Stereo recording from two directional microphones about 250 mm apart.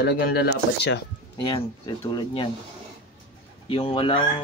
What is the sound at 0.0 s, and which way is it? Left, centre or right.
Speech, left.